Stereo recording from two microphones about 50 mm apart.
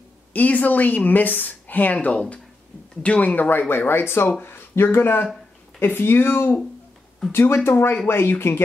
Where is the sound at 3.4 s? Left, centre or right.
Left.